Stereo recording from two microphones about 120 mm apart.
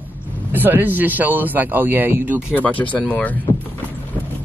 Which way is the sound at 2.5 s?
15° left (ahead or behind).